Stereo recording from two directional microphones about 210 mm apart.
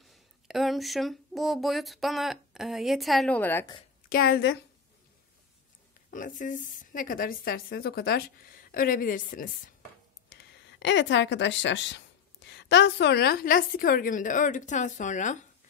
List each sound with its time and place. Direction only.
0.0 s speech: centre (ahead or behind)
4.1 s a woman's voice: 45° left (ahead or behind)
6.0 s a woman's voice: 40° left (ahead or behind)
10.3 s a woman's voice: 60° left (ahead or behind); by 15.3 s 35° left (ahead or behind)